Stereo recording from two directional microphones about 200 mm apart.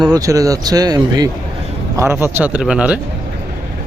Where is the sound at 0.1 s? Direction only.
15° right (ahead or behind).